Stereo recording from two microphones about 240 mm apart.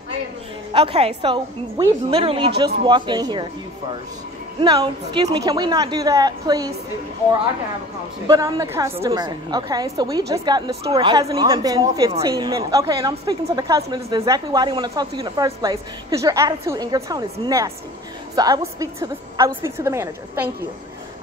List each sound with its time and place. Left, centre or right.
0.7 s a woman's voice: right
4.6 s a woman's voice: centre
8.3 s a woman's voice: centre